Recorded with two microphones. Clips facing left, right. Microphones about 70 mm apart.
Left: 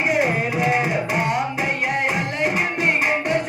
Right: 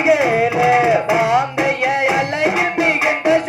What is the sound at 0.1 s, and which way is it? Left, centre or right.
Tabla, right.